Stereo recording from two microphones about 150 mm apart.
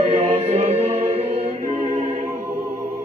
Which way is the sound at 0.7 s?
45° right (ahead or behind).